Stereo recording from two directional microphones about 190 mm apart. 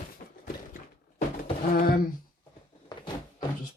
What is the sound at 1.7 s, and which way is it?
Speech, 50° left (ahead or behind).